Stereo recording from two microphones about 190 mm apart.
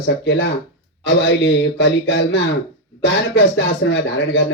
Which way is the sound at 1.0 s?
70° left (ahead or behind).